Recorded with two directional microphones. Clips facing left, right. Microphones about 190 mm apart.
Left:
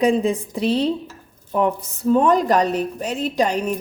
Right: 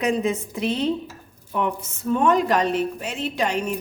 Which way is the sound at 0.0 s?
35° left (ahead or behind).